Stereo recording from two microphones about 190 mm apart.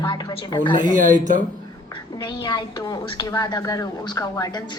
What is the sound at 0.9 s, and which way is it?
Speech, 40° right (ahead or behind).